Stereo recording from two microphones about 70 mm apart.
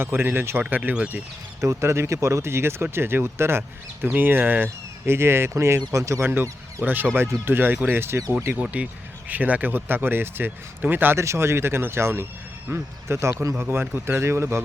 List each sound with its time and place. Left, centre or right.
0.0 s speech: right
1.6 s speech: right
6.2 s speech: right
8.5 s speech: centre
11.2 s speech: right